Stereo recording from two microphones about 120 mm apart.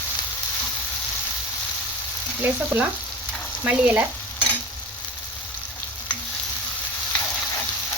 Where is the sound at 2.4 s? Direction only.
20° right (ahead or behind).